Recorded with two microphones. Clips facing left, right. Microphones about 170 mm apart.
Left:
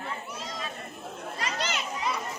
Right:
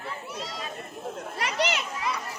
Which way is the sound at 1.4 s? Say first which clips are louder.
Right 5 dB; 70° right (ahead or behind).